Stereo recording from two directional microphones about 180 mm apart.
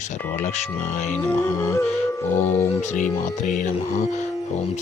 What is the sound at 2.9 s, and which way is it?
Speech, 45° left (ahead or behind).